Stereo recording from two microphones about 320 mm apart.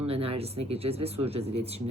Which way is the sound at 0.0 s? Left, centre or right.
Centre.